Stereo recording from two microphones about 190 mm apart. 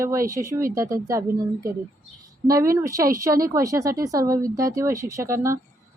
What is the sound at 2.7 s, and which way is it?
Speech, 15° right (ahead or behind).